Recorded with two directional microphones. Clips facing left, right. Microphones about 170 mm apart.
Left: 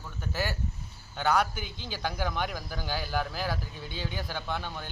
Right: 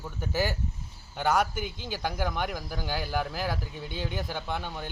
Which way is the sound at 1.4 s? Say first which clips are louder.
Right 3 dB; 50° right (ahead or behind).